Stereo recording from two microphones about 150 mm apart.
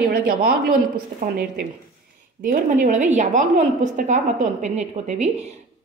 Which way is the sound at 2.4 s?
60° right (ahead or behind).